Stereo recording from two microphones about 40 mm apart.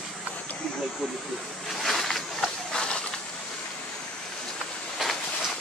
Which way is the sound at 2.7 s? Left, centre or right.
Left.